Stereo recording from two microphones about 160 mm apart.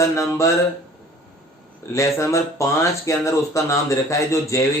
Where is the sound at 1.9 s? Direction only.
20° left (ahead or behind).